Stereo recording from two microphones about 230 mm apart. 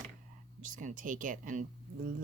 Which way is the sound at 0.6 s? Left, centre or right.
Right.